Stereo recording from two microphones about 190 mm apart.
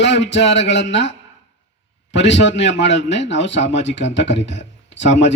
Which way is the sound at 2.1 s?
70° left (ahead or behind).